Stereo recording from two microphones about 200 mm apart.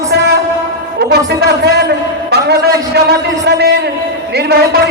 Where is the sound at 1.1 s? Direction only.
55° right (ahead or behind).